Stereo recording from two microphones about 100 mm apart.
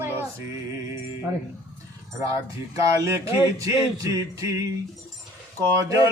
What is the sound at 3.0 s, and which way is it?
Speech, 30° right (ahead or behind).